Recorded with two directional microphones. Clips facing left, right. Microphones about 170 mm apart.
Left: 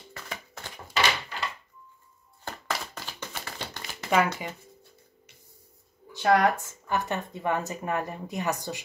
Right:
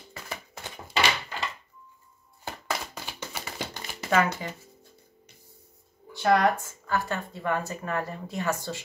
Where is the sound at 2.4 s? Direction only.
10° right (ahead or behind).